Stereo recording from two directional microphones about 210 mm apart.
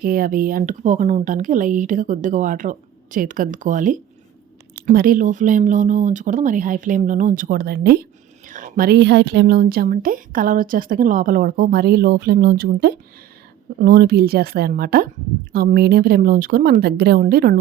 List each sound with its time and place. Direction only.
0.0 s a woman's voice: 45° right (ahead or behind)